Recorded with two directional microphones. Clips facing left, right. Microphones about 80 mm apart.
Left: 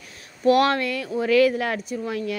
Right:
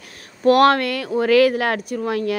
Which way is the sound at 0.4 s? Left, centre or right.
Right.